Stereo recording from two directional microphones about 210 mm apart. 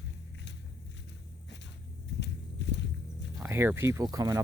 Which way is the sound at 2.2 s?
55° left (ahead or behind).